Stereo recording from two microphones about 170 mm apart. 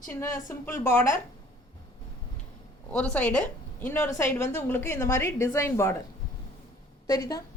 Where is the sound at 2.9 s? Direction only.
5° left (ahead or behind).